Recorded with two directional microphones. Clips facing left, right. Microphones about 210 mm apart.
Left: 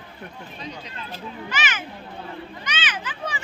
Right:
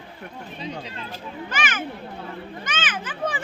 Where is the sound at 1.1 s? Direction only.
50° right (ahead or behind).